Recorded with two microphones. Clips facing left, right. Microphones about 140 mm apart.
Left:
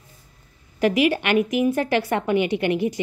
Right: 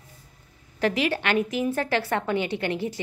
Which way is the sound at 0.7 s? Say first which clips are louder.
Left 5 dB; 10° left (ahead or behind).